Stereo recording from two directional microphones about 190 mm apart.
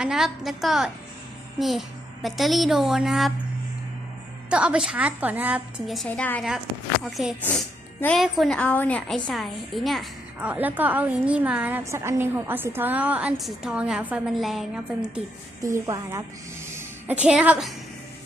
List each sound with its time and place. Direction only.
0.0 s a woman's voice: centre (ahead or behind)
4.4 s a woman's voice: 5° right (ahead or behind)
7.0 s a woman's voice: centre (ahead or behind)
15.6 s a woman's voice: 15° right (ahead or behind)
16.6 s music: 10° right (ahead or behind)